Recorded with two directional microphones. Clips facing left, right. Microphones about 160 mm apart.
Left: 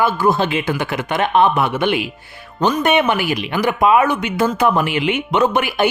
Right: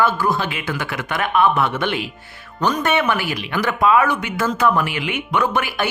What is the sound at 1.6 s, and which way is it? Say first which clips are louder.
Speech: left 3 dB; 15° left (ahead or behind).